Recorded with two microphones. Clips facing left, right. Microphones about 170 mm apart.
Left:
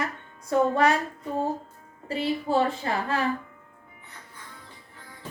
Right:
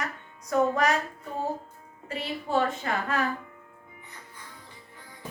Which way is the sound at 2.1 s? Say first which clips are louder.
Left 4 dB; 35° left (ahead or behind).